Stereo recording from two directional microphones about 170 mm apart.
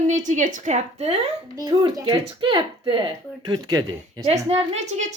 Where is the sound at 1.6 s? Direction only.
20° right (ahead or behind).